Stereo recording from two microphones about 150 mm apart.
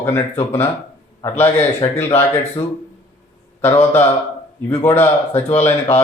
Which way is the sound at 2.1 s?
40° left (ahead or behind).